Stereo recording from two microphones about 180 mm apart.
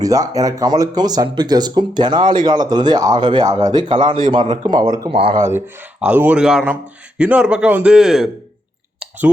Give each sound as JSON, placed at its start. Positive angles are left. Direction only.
{"t": 0.0, "sound": "speech", "side_deg": -20}
{"t": 5.1, "sound": "speech", "side_deg": -30}
{"t": 5.5, "sound": "a man's voice", "side_deg": -10}
{"t": 9.0, "sound": "clicking", "side_deg": -10}